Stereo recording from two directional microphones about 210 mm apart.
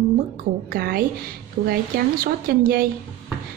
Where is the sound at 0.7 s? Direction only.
45° right (ahead or behind).